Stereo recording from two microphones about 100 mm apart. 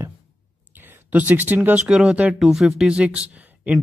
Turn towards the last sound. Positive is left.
turn(degrees=-15)  # may be behind; listen again after turning